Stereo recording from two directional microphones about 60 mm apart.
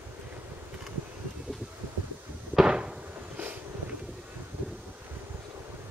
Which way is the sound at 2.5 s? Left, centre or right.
Centre.